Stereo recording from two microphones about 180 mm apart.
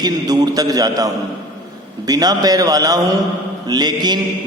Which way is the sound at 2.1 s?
20° right (ahead or behind).